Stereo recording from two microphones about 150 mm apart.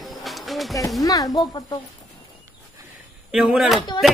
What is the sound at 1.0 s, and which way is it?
Speech, 25° left (ahead or behind).